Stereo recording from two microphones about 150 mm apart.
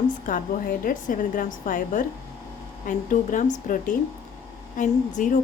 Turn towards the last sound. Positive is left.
turn(degrees=55)  # may be behind; listen again after turning